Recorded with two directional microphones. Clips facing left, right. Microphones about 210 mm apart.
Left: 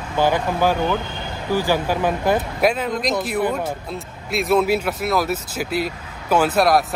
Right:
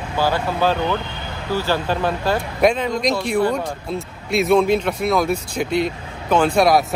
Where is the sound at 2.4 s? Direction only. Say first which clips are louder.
Right 2 dB; 5° left (ahead or behind).